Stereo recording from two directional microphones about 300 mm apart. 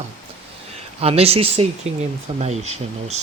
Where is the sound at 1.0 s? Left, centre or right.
Centre.